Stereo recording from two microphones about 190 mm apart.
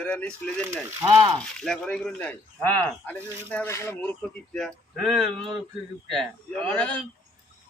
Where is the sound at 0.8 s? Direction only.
15° right (ahead or behind).